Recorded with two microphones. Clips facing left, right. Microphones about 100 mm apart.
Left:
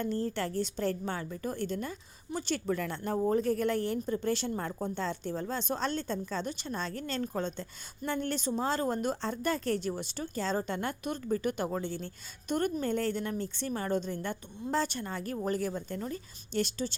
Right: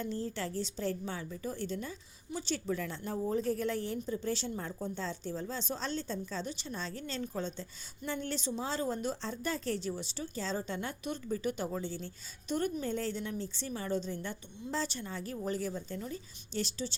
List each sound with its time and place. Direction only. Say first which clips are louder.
0.0 s a woman's voice: left 4 dB; 55° left (ahead or behind)